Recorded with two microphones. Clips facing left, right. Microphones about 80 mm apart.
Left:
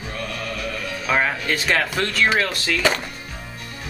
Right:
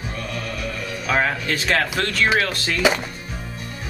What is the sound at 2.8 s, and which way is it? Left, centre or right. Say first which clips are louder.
Speech: right 2 dB; centre.